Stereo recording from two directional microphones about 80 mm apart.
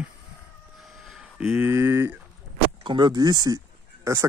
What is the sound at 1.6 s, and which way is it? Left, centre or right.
Speech, right.